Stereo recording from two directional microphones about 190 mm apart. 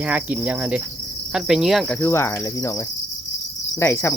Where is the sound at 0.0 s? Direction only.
5° right (ahead or behind).